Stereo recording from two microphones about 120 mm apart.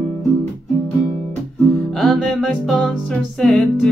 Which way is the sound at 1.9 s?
5° left (ahead or behind).